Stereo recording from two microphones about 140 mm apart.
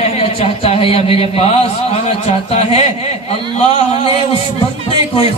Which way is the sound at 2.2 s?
50° left (ahead or behind).